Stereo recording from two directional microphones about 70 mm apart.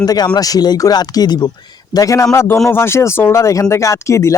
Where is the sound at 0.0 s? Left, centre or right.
Left.